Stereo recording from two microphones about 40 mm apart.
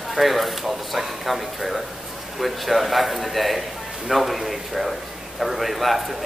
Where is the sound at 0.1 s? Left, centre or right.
Centre.